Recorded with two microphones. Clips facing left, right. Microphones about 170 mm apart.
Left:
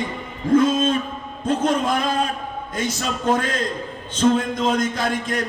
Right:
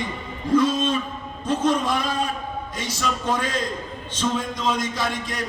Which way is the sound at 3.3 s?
55° left (ahead or behind).